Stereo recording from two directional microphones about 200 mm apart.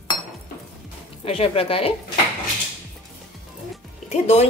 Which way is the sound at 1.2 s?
30° left (ahead or behind).